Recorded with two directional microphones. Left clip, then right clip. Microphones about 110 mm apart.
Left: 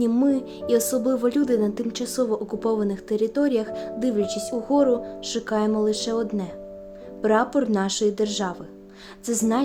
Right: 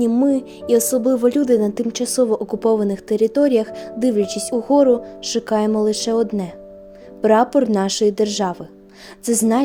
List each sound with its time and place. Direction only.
0.0 s music: 30° right (ahead or behind)
0.3 s speech: 45° right (ahead or behind); by 9.6 s 75° right (ahead or behind)